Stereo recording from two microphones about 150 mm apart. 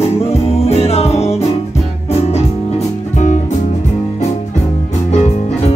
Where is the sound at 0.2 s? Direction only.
45° left (ahead or behind).